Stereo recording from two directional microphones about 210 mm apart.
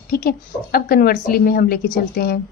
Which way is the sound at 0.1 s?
45° left (ahead or behind).